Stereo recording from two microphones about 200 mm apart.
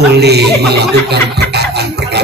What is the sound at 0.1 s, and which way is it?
Speech, 55° right (ahead or behind).